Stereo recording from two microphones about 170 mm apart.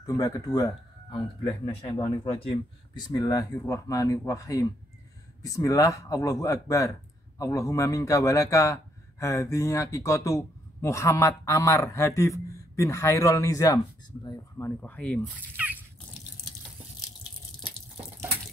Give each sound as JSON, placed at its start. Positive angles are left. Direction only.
{"t": 0.0, "sound": "a man's voice", "side_deg": 20}
{"t": 14.8, "sound": "a man's voice", "side_deg": 10}